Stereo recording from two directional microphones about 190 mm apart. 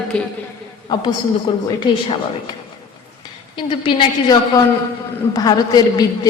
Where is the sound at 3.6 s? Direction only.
25° left (ahead or behind).